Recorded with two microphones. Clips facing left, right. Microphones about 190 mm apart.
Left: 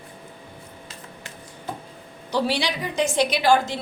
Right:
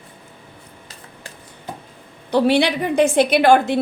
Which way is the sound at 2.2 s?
60° right (ahead or behind).